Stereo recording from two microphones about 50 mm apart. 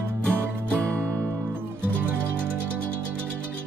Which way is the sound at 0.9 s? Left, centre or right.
Right.